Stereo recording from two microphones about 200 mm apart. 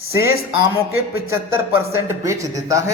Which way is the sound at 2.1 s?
15° right (ahead or behind).